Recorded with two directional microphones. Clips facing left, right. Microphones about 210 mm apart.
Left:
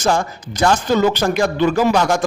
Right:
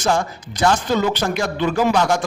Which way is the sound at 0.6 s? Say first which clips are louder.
Left 3 dB; 40° left (ahead or behind).